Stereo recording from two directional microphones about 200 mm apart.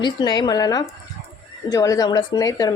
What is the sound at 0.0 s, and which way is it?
A woman's voice, 20° left (ahead or behind).